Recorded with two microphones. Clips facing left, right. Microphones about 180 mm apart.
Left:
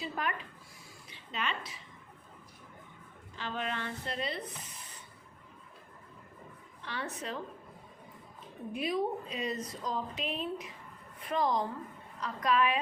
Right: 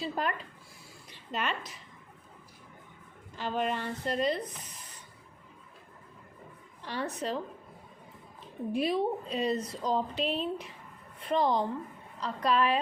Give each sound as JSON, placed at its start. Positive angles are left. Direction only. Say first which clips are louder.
{"t": 0.0, "sound": "a woman's voice", "louder": "right 4 dB", "side_deg": -35}
{"t": 1.3, "sound": "a woman's voice", "louder": "right 3 dB", "side_deg": -45}
{"t": 3.3, "sound": "a woman's voice", "louder": "right 5 dB", "side_deg": -45}
{"t": 6.8, "sound": "a woman's voice", "louder": "right 5 dB", "side_deg": -35}
{"t": 8.7, "sound": "a woman's voice", "louder": "right 4 dB", "side_deg": -30}